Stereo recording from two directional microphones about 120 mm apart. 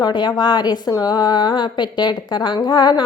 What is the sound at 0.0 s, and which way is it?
A woman's voice, 35° left (ahead or behind).